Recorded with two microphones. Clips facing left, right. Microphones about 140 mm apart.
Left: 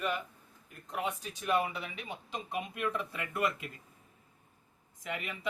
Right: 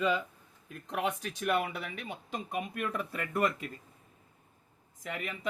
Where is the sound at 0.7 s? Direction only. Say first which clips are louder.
Right 3 dB; 85° right; by 3.6 s 40° right (ahead or behind).